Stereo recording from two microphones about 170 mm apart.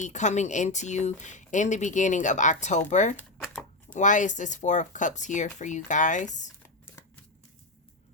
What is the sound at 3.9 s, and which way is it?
Speech, 50° left (ahead or behind).